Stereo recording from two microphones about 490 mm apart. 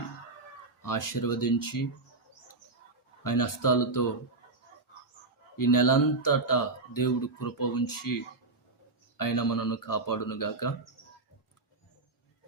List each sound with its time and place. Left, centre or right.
0.8 s speech: left
3.2 s speech: left
5.5 s speech: left